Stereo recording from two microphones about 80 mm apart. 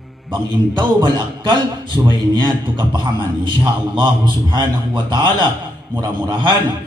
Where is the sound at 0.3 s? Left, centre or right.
Right.